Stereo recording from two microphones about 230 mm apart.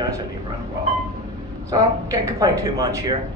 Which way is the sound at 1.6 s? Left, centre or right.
Centre.